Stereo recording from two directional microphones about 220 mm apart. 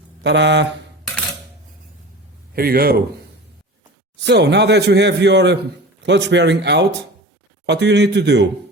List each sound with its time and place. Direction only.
0.2 s a man's voice: 55° right (ahead or behind)
2.6 s a man's voice: 45° right (ahead or behind)
4.3 s a man's voice: 50° right (ahead or behind)